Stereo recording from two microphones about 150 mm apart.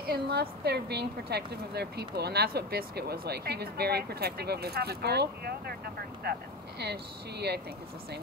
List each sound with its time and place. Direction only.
0.0 s a woman's voice: 90° right